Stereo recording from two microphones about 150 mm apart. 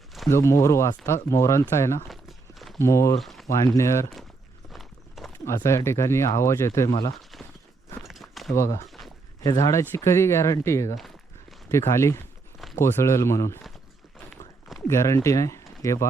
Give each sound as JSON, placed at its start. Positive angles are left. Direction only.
{"t": 0.3, "sound": "speech", "side_deg": 20}
{"t": 3.2, "sound": "speech", "side_deg": 0}
{"t": 3.4, "sound": "speech", "side_deg": 20}
{"t": 4.7, "sound": "horse", "side_deg": 0}
{"t": 5.5, "sound": "speech", "side_deg": 20}
{"t": 7.1, "sound": "a sound", "side_deg": 0}
{"t": 8.0, "sound": "walk", "side_deg": 0}
{"t": 8.5, "sound": "speech", "side_deg": 20}
{"t": 14.8, "sound": "speech", "side_deg": 20}